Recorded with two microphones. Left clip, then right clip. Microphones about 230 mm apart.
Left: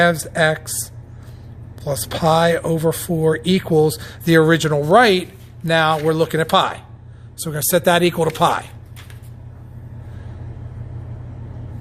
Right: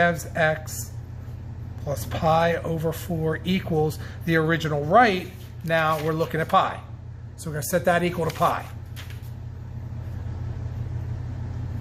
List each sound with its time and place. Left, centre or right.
0.0 s speech: left
1.8 s speech: left